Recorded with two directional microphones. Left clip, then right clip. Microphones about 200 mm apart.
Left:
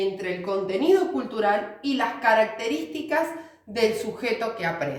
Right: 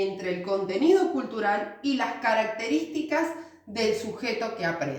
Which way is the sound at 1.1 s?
25° left (ahead or behind).